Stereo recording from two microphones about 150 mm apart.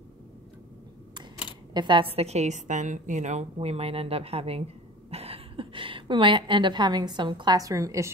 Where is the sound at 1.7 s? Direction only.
30° right (ahead or behind).